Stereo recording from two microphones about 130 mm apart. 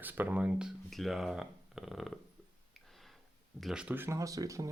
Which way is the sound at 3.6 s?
5° right (ahead or behind).